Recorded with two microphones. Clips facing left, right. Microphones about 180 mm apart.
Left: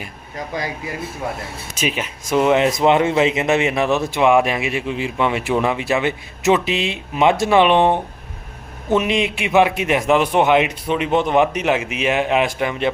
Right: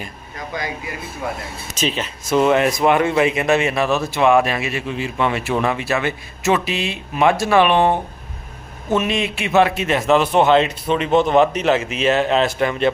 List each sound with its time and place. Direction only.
0.3 s speech: 35° left (ahead or behind)
1.7 s speech: 10° left (ahead or behind)